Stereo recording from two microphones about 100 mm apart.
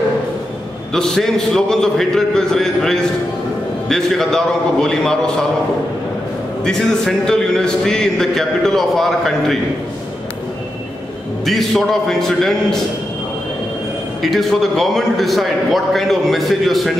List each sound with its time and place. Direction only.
0.9 s a man's voice: 5° left (ahead or behind)
6.6 s a man's voice: 5° left (ahead or behind)
11.4 s a man's voice: 5° left (ahead or behind)
14.2 s a man's voice: centre (ahead or behind)